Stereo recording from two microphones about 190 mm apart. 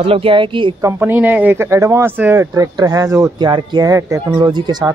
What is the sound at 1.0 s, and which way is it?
Speech, 10° right (ahead or behind).